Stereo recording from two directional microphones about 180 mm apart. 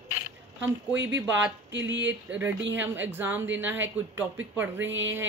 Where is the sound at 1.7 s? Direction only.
85° right.